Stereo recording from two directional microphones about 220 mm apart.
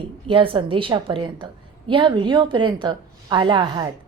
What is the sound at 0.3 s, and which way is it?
A woman's voice, 25° right (ahead or behind).